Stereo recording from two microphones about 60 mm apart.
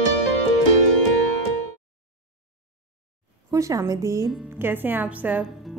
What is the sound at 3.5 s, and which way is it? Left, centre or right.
Speech, right.